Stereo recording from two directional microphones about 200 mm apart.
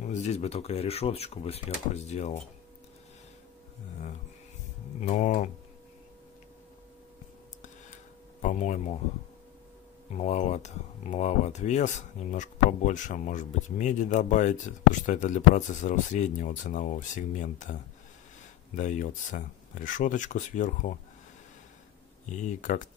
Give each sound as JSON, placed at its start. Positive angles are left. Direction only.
{"t": 0.0, "sound": "speech", "side_deg": 35}
{"t": 5.0, "sound": "speech", "side_deg": 35}
{"t": 7.6, "sound": "tick-tock", "side_deg": 35}
{"t": 10.1, "sound": "speech", "side_deg": 35}
{"t": 18.8, "sound": "speech", "side_deg": 40}
{"t": 22.4, "sound": "speech", "side_deg": 40}